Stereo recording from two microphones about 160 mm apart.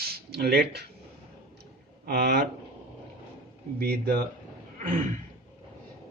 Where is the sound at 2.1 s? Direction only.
80° right.